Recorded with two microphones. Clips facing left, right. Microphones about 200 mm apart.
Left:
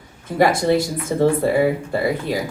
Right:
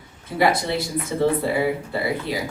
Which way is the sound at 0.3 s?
50° left (ahead or behind).